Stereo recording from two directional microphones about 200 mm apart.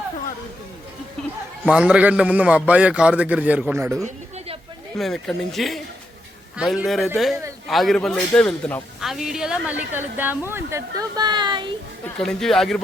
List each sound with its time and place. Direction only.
1.7 s a man's voice: 5° right (ahead or behind)
4.9 s a man's voice: centre (ahead or behind); by 11.7 s 25° right (ahead or behind)
12.0 s a man's voice: 5° left (ahead or behind)